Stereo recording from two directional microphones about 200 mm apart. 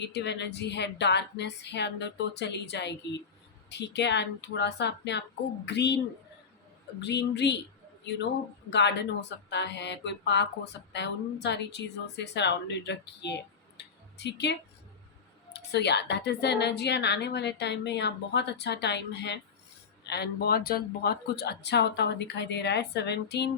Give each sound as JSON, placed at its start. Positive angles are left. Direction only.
{"t": 0.0, "sound": "speech", "side_deg": 60}
{"t": 7.0, "sound": "speech", "side_deg": 60}
{"t": 8.7, "sound": "speech", "side_deg": 60}
{"t": 13.7, "sound": "a sound", "side_deg": 60}
{"t": 15.5, "sound": "speech", "side_deg": 60}